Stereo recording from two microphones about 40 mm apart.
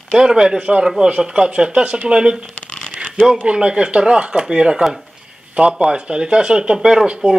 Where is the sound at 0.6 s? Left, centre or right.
Right.